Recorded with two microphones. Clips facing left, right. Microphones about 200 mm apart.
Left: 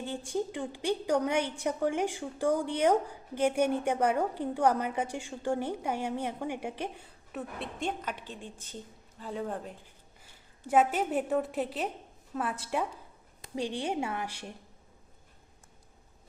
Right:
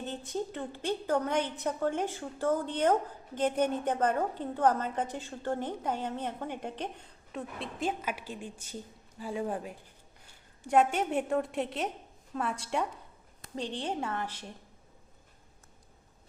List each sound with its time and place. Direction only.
0.0 s a woman's voice: 10° left (ahead or behind); by 9.7 s 10° right (ahead or behind)
10.7 s a woman's voice: 5° left (ahead or behind)